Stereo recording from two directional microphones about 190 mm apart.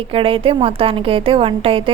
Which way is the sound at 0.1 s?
30° right (ahead or behind).